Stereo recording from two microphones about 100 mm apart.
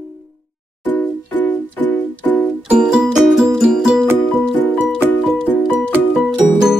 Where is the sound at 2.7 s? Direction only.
10° right (ahead or behind).